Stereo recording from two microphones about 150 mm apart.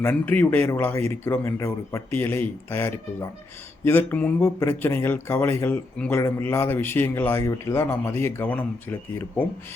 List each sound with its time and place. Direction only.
0.0 s speech: 10° left (ahead or behind)